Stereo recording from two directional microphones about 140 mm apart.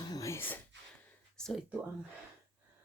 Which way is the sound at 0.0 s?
25° left (ahead or behind).